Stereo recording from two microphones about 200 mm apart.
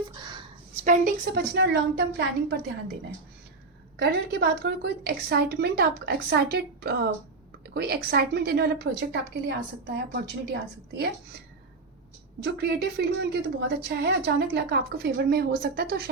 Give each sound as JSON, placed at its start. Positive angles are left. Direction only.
{"t": 0.2, "sound": "a sound", "side_deg": -25}
{"t": 0.9, "sound": "a woman's voice", "side_deg": -45}
{"t": 3.9, "sound": "a woman's voice", "side_deg": -55}
{"t": 12.4, "sound": "a woman's voice", "side_deg": -55}